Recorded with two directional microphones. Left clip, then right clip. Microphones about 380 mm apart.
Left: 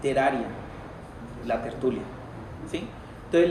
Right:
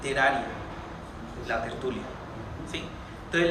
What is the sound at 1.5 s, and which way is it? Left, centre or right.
Speech, centre.